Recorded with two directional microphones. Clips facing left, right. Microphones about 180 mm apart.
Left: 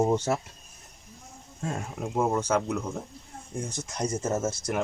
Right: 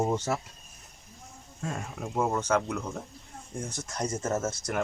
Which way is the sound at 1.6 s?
35° left (ahead or behind).